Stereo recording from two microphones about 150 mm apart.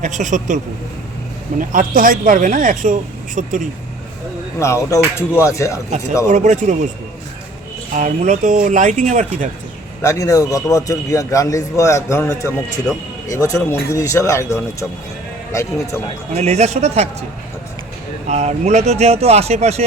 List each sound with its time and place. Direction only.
0.0 s speech: 55° right (ahead or behind)
4.6 s a man's voice: 20° left (ahead or behind)
6.2 s speech: 50° right (ahead or behind)
7.9 s speech: 55° right (ahead or behind)
10.0 s a man's voice: 20° left (ahead or behind)
12.9 s speech: centre (ahead or behind)
13.2 s a man's voice: 20° left (ahead or behind)
16.3 s speech: 45° right (ahead or behind)
18.3 s speech: 50° right (ahead or behind)